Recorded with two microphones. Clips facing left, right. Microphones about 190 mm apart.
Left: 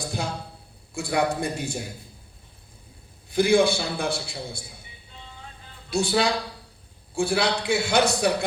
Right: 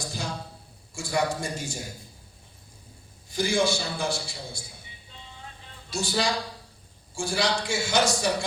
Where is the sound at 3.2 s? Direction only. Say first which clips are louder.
Left 6 dB; 60° left (ahead or behind).